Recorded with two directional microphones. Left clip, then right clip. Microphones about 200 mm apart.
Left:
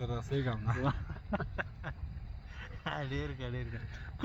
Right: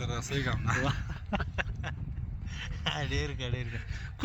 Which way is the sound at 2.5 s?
60° right (ahead or behind).